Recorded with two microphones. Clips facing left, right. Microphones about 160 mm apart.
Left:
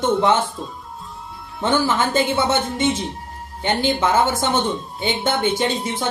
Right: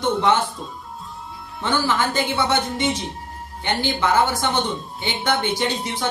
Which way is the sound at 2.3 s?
25° left (ahead or behind).